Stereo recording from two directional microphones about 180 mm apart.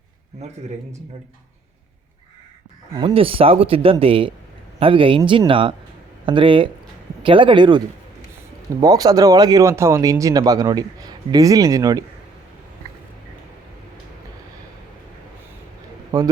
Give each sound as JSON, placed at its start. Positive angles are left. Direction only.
{"t": 0.4, "sound": "speech", "side_deg": -35}
{"t": 2.9, "sound": "speech", "side_deg": -30}
{"t": 8.8, "sound": "speech", "side_deg": -20}
{"t": 16.1, "sound": "speech", "side_deg": -20}